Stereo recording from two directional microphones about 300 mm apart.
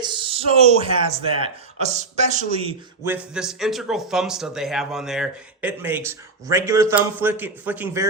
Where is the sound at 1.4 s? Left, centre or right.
Right.